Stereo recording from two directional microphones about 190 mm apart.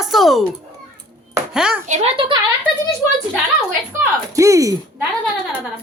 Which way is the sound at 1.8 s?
35° right (ahead or behind).